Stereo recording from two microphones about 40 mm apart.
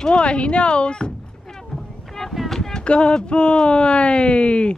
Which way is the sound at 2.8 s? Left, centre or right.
Left.